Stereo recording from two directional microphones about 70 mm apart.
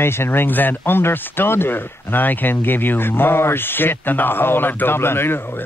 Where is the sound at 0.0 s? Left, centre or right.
Left.